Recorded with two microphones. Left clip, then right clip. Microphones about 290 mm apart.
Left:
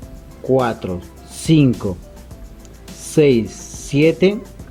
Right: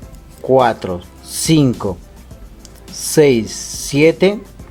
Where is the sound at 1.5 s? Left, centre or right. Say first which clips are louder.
Right 1 dB; right.